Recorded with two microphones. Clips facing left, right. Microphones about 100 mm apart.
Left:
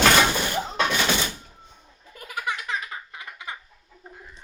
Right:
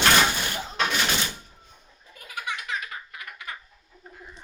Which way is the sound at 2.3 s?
40° left (ahead or behind).